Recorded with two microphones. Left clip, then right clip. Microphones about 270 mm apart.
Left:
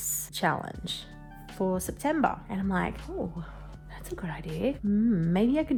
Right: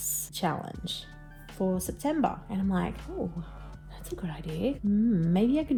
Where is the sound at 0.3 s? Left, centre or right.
Left.